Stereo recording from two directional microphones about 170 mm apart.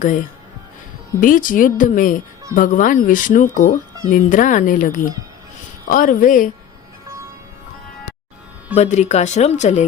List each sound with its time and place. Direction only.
1.2 s speech: 50° left (ahead or behind)
8.7 s speech: 40° left (ahead or behind)